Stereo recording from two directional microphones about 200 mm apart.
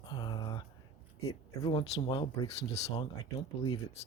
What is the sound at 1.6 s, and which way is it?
Speech, 25° left (ahead or behind).